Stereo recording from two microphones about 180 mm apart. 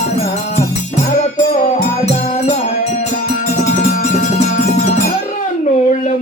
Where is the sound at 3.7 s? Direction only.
40° left (ahead or behind).